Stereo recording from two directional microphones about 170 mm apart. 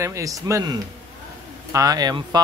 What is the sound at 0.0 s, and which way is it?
A man's voice, 20° right (ahead or behind).